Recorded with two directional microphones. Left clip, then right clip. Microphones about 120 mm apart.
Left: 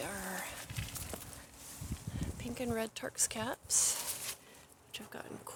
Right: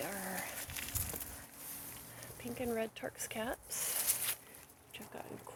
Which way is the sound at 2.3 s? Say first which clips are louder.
Even; 25° left (ahead or behind).